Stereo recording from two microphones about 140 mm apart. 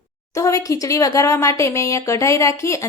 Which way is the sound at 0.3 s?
25° left (ahead or behind).